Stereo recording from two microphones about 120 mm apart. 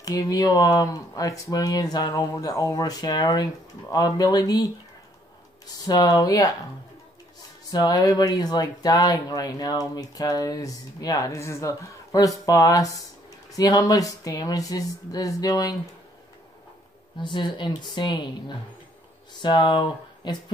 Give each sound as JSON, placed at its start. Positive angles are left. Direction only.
{"t": 0.0, "sound": "speech", "side_deg": 30}
{"t": 5.9, "sound": "speech", "side_deg": 30}
{"t": 7.7, "sound": "speech", "side_deg": 35}
{"t": 17.2, "sound": "speech", "side_deg": 40}
{"t": 19.4, "sound": "speech", "side_deg": 40}